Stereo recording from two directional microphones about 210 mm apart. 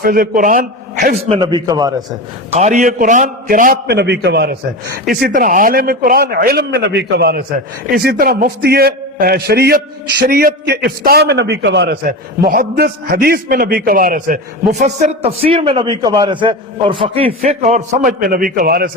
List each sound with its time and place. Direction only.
0.0 s a man's voice: 45° right (ahead or behind)
1.3 s a man's voice: 20° right (ahead or behind)
2.5 s a man's voice: 35° right (ahead or behind)